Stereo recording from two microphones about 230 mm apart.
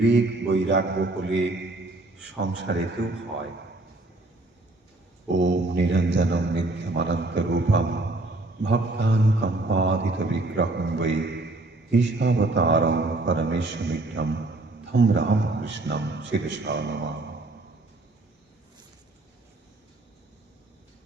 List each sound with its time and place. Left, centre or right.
0.0 s a man's voice: right
2.7 s a man's voice: right
5.3 s a man's voice: right